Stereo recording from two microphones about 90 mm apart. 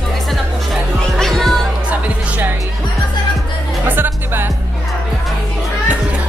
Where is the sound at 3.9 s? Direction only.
25° right (ahead or behind).